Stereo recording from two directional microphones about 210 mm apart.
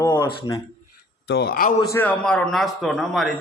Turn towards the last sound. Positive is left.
turn(degrees=0)  # may be behind; listen again after turning